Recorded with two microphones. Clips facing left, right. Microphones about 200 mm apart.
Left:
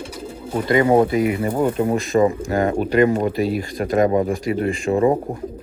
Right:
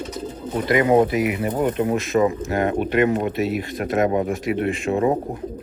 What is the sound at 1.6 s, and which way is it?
Speech, 10° left (ahead or behind).